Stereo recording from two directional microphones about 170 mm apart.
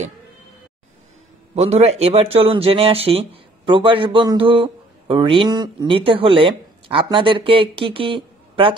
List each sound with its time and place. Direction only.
1.5 s a man's voice: 40° right (ahead or behind)